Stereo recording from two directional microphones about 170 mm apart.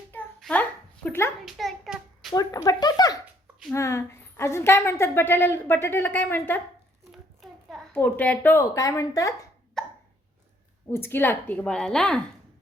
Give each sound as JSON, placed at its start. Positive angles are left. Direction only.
{"t": 0.3, "sound": "a sound", "side_deg": 5}
{"t": 1.5, "sound": "hands", "side_deg": 0}
{"t": 2.3, "sound": "a woman's voice", "side_deg": 20}
{"t": 7.9, "sound": "a woman's voice", "side_deg": 10}
{"t": 9.8, "sound": "hiccup", "side_deg": 5}
{"t": 10.9, "sound": "a woman's voice", "side_deg": 10}